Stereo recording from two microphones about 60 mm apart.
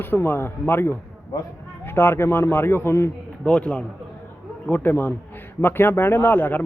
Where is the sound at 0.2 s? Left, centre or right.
Left.